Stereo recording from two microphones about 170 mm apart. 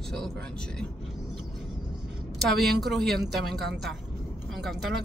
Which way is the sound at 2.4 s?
Centre (ahead or behind).